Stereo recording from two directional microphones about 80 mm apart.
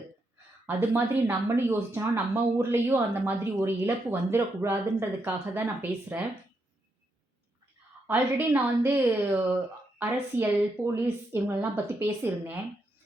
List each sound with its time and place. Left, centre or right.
0.8 s speech: right
8.0 s speech: right
8.9 s a woman's voice: right